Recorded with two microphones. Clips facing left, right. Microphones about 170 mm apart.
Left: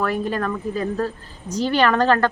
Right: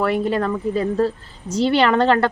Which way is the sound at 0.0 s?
25° right (ahead or behind).